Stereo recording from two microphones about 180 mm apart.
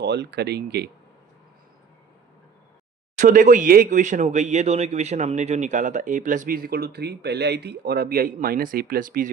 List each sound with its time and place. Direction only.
0.0 s speech: 70° right (ahead or behind)
3.2 s speech: 45° right (ahead or behind)